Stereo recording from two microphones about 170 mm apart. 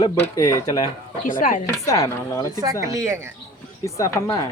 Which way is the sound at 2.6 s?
20° right (ahead or behind).